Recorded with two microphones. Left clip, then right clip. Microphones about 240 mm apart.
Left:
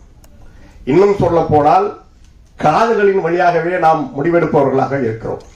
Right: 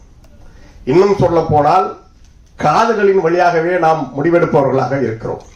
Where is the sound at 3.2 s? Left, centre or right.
Right.